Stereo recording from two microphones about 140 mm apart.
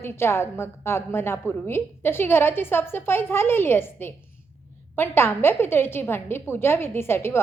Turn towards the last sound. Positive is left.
turn(degrees=15)  # may be behind; listen again after turning